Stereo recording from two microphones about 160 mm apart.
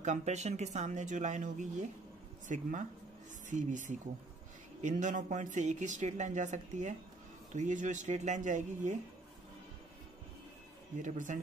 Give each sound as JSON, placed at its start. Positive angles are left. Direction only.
{"t": 0.0, "sound": "speech", "side_deg": -45}
{"t": 11.0, "sound": "speech", "side_deg": -55}